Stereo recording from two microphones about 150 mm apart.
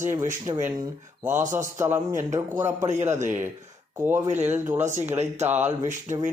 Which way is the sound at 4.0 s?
15° right (ahead or behind).